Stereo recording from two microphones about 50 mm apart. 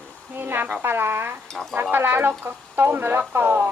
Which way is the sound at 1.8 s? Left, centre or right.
Right.